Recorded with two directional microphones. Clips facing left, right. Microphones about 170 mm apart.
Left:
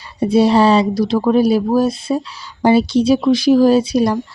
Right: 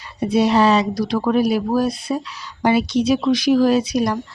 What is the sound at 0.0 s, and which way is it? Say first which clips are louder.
Speech: left 4 dB; 30° left (ahead or behind).